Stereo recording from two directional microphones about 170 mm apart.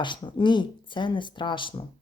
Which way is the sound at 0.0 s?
25° left (ahead or behind).